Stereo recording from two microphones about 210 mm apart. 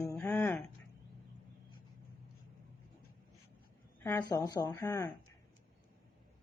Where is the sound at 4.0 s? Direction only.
15° left (ahead or behind).